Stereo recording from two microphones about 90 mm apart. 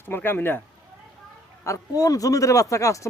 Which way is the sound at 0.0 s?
25° left (ahead or behind).